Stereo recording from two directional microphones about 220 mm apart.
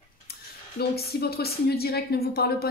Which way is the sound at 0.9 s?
45° left (ahead or behind).